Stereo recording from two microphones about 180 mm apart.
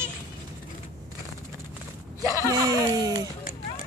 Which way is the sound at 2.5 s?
20° right (ahead or behind).